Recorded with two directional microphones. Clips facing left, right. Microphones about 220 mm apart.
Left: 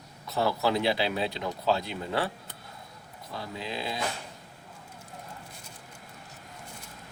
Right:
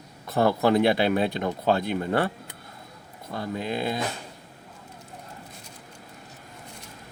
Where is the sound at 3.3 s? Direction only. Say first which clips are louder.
Right 7 dB; 50° right (ahead or behind).